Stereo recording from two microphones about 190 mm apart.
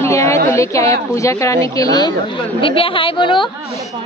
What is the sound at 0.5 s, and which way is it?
A woman's voice, 15° left (ahead or behind).